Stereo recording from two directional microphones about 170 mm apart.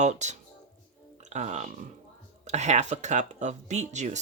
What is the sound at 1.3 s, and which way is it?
Speech, 45° right (ahead or behind).